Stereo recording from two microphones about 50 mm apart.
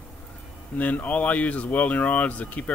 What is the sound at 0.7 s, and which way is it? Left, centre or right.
Speech, left.